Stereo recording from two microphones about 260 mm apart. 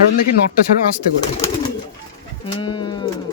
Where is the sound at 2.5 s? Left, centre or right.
Centre.